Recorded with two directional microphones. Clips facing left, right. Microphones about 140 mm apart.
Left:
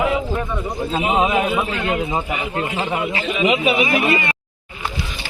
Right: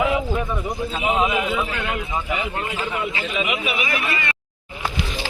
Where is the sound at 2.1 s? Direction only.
25° left (ahead or behind).